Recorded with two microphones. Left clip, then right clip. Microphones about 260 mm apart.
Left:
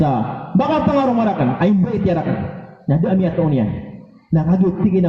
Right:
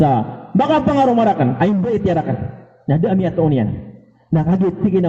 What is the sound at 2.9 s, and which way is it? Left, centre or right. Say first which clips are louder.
Speech: right 1 dB; right.